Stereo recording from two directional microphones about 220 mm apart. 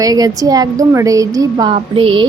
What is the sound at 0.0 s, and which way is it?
A woman's voice, 15° right (ahead or behind).